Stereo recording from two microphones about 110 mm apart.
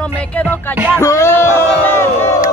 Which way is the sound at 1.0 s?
25° left (ahead or behind).